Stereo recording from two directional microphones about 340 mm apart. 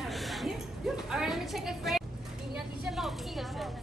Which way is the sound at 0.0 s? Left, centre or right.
Centre.